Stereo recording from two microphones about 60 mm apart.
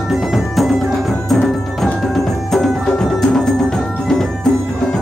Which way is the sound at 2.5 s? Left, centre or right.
Centre.